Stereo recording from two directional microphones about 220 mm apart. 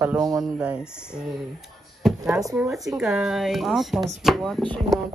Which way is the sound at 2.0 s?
Centre (ahead or behind).